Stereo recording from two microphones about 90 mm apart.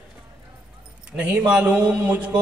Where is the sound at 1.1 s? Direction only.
15° right (ahead or behind).